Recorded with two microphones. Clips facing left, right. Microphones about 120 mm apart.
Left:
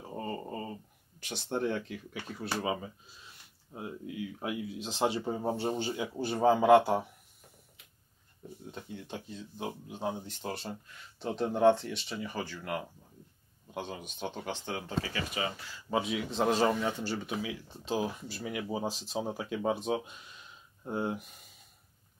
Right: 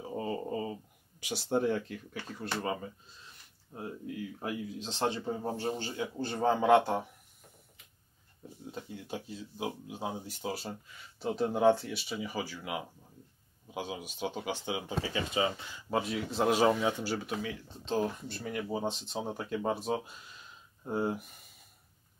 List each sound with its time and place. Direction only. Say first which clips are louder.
0.1 s a sound: right 3 dB; 5° right (ahead or behind)
1.2 s a man's voice: right 3 dB; 5° right (ahead or behind)
8.9 s speech: even; 5° right (ahead or behind)
15.1 s speech: right 4 dB; 25° right (ahead or behind)
15.9 s speech: left 1 dB; centre (ahead or behind)